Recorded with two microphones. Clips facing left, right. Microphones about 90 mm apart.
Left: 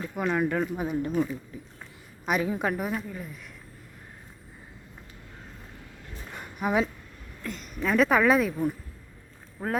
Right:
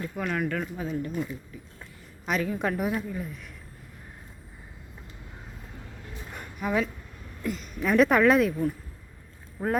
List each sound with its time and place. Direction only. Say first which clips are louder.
0.0 s speech: left 3 dB; 15° left (ahead or behind)
2.2 s speech: left 1 dB; 10° left (ahead or behind)
2.6 s speech: right 1 dB; centre (ahead or behind)
6.6 s speech: left 2 dB; 20° left (ahead or behind)
7.4 s speech: right 2 dB; centre (ahead or behind)